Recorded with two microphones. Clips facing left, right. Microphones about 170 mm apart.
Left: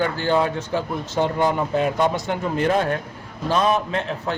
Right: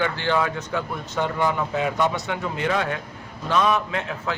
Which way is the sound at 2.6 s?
45° left (ahead or behind).